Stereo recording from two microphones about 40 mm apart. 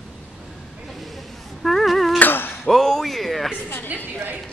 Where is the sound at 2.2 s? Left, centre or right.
Left.